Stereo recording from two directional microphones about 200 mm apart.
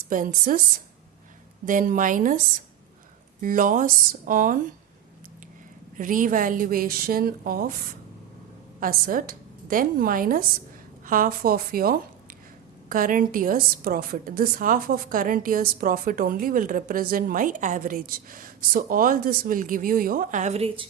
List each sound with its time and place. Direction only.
0.1 s a woman's voice: 40° right (ahead or behind)
1.6 s a woman's voice: 40° right (ahead or behind)
3.4 s a woman's voice: 40° right (ahead or behind)
6.0 s a woman's voice: 40° right (ahead or behind)